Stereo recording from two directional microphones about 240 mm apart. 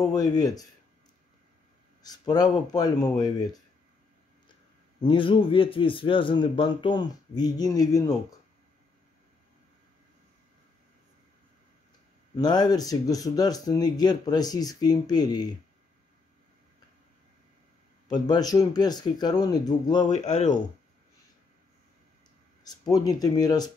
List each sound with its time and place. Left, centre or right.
0.0 s speech: centre
2.0 s speech: centre
5.0 s a man's voice: left
12.4 s speech: centre
18.0 s speech: centre
20.2 s speech: left
22.6 s speech: centre